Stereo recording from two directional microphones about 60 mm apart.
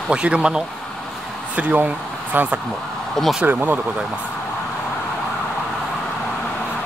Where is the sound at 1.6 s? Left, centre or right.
Right.